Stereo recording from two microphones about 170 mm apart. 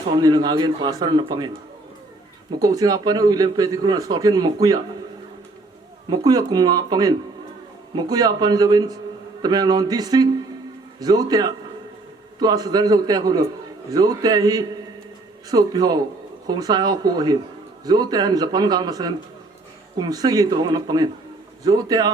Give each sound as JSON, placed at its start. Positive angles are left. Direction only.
{"t": 0.1, "sound": "a man's voice", "side_deg": -25}
{"t": 2.6, "sound": "a man's voice", "side_deg": -20}
{"t": 6.1, "sound": "a man's voice", "side_deg": -20}